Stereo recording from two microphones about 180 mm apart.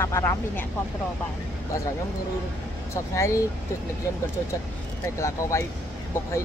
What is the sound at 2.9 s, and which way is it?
Speech, 15° left (ahead or behind).